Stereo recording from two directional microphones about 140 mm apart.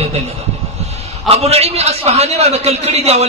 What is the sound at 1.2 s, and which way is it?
A man's voice, 50° right (ahead or behind).